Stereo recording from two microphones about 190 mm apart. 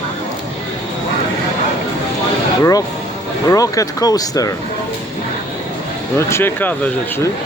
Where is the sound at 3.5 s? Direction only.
15° left (ahead or behind).